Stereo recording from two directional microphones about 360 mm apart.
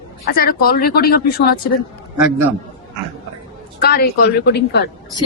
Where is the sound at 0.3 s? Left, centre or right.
Left.